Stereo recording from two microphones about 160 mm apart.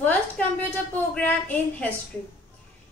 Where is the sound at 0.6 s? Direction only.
10° left (ahead or behind).